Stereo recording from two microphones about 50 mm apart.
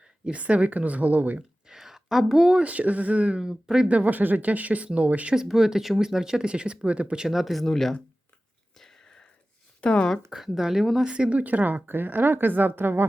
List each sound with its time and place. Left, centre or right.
0.3 s speech: right
1.4 s a sound: centre
2.5 s speech: right
3.4 s speech: centre
3.8 s speech: right
5.3 s speech: centre
7.3 s speech: centre
7.6 s speech: centre
8.8 s a sound: centre
9.8 s speech: left
10.3 s speech: centre
11.0 s speech: right